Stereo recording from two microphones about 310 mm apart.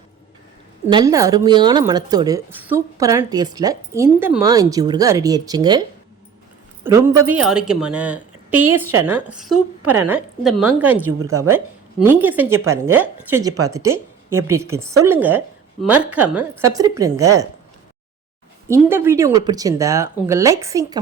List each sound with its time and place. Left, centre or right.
0.9 s a woman's voice: centre
6.8 s a woman's voice: centre
9.8 s a woman's voice: right
10.1 s a woman's voice: centre
18.7 s a woman's voice: centre